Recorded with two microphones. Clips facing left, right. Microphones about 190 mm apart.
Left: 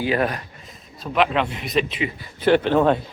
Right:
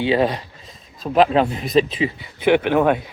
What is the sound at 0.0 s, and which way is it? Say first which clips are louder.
Speech: right 4 dB; 25° right (ahead or behind).